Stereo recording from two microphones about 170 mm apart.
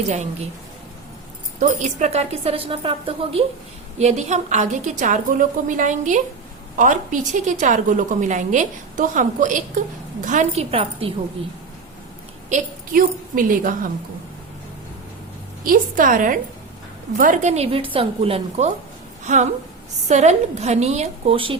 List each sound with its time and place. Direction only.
1.5 s speech: 45° right (ahead or behind)
3.9 s a woman's voice: 40° right (ahead or behind)
12.5 s a woman's voice: 50° right (ahead or behind)
15.6 s a woman's voice: 55° right (ahead or behind); by 21.6 s 30° right (ahead or behind)